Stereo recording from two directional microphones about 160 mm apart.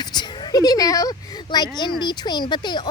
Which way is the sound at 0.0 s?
25° left (ahead or behind).